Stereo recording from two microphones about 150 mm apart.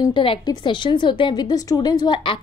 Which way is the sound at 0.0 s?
35° left (ahead or behind).